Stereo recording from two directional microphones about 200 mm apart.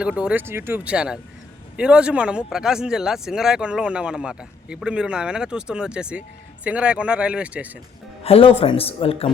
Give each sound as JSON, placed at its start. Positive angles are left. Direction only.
{"t": 0.0, "sound": "speech", "side_deg": -5}
{"t": 8.2, "sound": "speech", "side_deg": 30}